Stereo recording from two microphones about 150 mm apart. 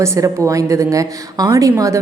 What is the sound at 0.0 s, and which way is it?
A woman's voice, 20° right (ahead or behind).